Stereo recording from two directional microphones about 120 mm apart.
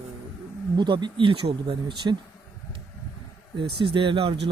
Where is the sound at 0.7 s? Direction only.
40° right (ahead or behind).